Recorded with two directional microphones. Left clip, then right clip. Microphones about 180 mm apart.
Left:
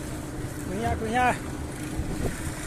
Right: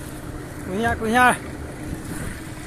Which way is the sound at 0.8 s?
35° right (ahead or behind).